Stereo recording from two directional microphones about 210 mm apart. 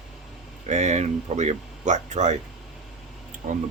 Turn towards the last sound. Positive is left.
turn(degrees=-40)  # may be behind; listen again after turning